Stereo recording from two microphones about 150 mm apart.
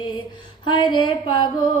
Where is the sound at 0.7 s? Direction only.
30° left (ahead or behind).